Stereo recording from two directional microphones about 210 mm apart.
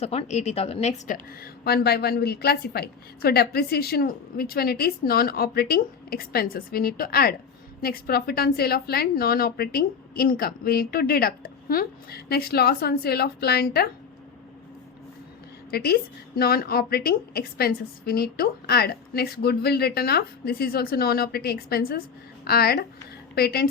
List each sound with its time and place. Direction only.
0.0 s a woman's voice: 30° left (ahead or behind); by 13.9 s 50° left (ahead or behind)
15.7 s a woman's voice: 50° left (ahead or behind)